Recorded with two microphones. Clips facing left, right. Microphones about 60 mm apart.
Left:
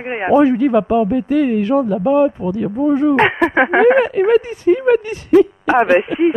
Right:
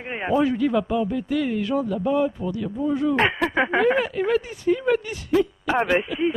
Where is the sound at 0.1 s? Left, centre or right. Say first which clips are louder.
Left 9 dB; left.